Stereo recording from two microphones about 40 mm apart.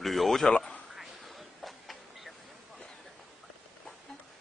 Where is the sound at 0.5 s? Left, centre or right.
Left.